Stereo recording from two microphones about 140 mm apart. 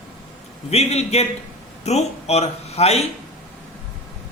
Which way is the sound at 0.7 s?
50° left (ahead or behind).